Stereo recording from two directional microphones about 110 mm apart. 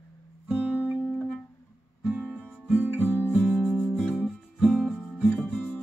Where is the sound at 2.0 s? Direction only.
15° right (ahead or behind).